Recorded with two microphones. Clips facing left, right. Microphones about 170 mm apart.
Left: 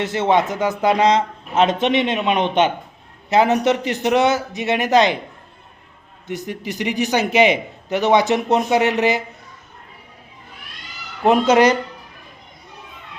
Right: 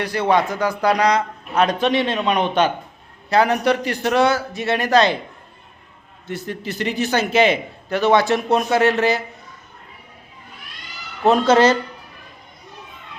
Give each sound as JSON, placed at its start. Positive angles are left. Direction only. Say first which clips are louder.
{"t": 0.0, "sound": "a man's voice", "louder": "left 1 dB", "side_deg": 20}
{"t": 6.2, "sound": "a man's voice", "louder": "left 1 dB", "side_deg": 15}
{"t": 11.2, "sound": "a man's voice", "louder": "even", "side_deg": 15}